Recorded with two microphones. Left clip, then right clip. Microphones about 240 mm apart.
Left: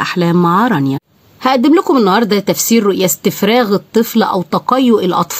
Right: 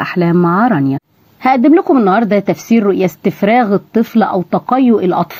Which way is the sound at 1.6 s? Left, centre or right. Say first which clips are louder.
Even; left.